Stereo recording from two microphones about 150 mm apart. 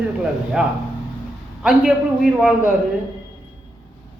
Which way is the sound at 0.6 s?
5° right (ahead or behind).